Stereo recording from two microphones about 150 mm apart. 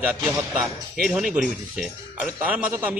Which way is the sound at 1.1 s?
5° right (ahead or behind).